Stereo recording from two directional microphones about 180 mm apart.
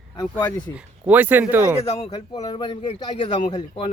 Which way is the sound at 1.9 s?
35° left (ahead or behind).